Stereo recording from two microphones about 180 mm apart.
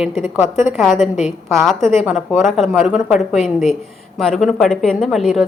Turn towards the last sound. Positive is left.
turn(degrees=0)  # may be behind; listen again after turning